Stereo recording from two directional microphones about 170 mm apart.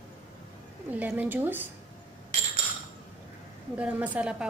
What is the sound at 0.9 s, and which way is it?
Speech, 10° right (ahead or behind).